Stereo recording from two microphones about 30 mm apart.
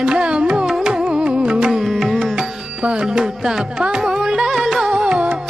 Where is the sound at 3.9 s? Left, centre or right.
Right.